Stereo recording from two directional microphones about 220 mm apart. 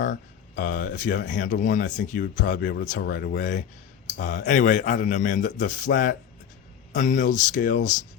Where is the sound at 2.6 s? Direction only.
50° left (ahead or behind).